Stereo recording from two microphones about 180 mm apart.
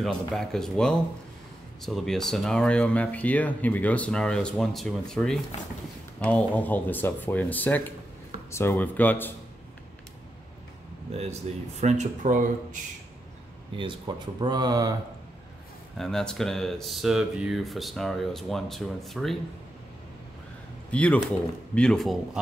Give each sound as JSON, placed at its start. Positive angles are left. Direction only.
{"t": 0.3, "sound": "speech", "side_deg": 0}
{"t": 11.1, "sound": "speech", "side_deg": -35}
{"t": 13.7, "sound": "speech", "side_deg": -25}
{"t": 16.0, "sound": "speech", "side_deg": 5}
{"t": 20.9, "sound": "speech", "side_deg": 5}